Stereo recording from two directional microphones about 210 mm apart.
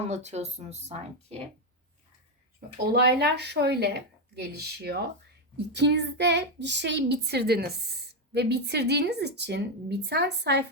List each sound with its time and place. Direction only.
0.1 s speech: 30° right (ahead or behind)
2.9 s a child's voice: 50° right (ahead or behind)